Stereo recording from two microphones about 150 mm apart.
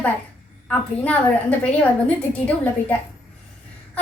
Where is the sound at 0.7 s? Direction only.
10° left (ahead or behind).